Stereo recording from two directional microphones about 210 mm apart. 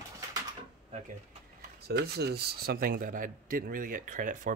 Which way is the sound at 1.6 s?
50° right (ahead or behind).